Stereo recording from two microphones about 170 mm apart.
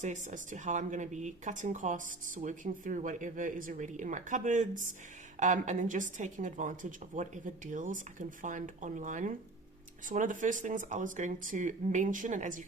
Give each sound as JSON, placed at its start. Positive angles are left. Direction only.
{"t": 0.0, "sound": "speech", "side_deg": -45}